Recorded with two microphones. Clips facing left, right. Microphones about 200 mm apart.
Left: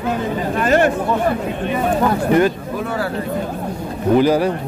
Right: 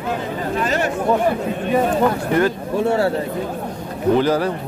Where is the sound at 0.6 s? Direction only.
55° left (ahead or behind).